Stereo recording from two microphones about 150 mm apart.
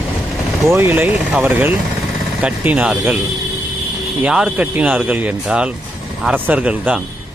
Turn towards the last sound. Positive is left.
turn(degrees=-5)  # may be behind; listen again after turning